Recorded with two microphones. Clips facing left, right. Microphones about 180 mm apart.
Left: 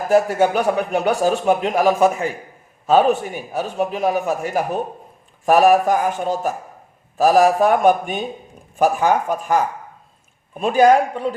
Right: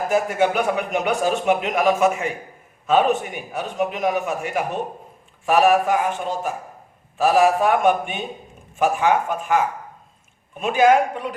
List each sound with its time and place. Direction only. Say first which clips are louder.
0.1 s a man's voice: left 5 dB; 35° left (ahead or behind)